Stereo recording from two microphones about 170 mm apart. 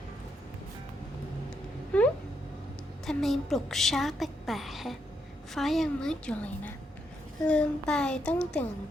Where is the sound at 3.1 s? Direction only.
Centre (ahead or behind).